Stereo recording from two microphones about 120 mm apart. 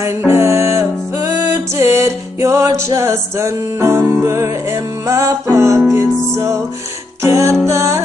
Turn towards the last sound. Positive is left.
turn(degrees=-25)  # may be behind; listen again after turning